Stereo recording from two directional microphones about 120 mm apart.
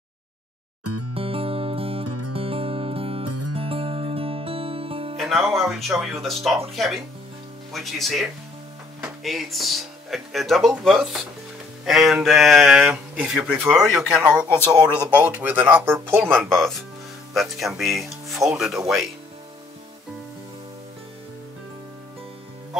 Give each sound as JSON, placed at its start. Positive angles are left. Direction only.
{"t": 1.1, "sound": "music", "side_deg": -50}
{"t": 5.1, "sound": "speech", "side_deg": 0}
{"t": 16.3, "sound": "speech", "side_deg": 5}